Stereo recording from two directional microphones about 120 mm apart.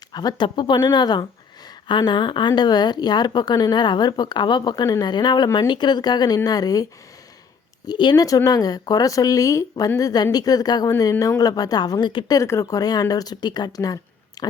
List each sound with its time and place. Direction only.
0.1 s speech: 35° left (ahead or behind)
7.9 s speech: 35° left (ahead or behind)
12.4 s speech: 25° left (ahead or behind)